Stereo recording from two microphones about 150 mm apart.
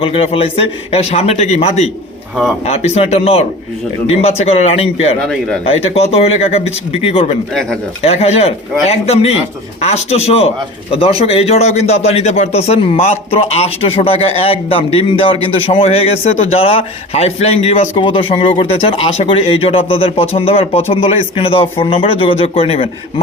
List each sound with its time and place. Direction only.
0.0 s a man's voice: 40° left (ahead or behind)
5.2 s speech: centre (ahead or behind)
5.6 s speech: 40° left (ahead or behind)
7.5 s speech: 5° left (ahead or behind)
8.0 s a man's voice: 45° left (ahead or behind)